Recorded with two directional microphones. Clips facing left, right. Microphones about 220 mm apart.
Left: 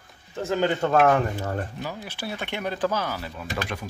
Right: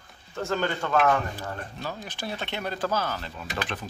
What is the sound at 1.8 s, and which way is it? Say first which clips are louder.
Speech: left 1 dB; 10° left (ahead or behind).